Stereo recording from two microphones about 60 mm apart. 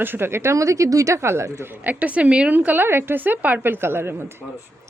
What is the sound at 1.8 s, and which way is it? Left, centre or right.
Speech, right.